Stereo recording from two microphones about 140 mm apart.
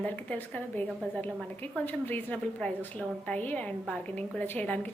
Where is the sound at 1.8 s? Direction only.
15° left (ahead or behind).